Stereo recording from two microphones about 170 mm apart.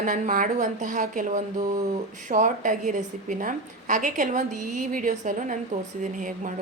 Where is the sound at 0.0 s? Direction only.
50° right (ahead or behind).